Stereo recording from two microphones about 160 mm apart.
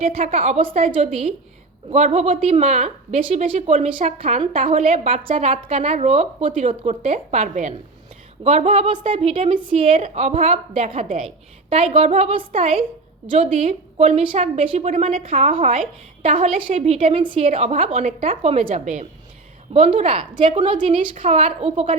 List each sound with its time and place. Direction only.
0.3 s a woman's voice: 40° right (ahead or behind)
11.9 s a woman's voice: 40° right (ahead or behind)